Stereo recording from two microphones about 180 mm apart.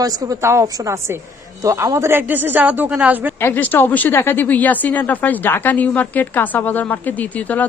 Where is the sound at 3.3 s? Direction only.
10° left (ahead or behind).